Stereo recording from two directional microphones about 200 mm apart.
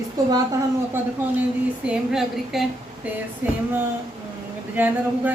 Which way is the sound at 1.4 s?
5° right (ahead or behind).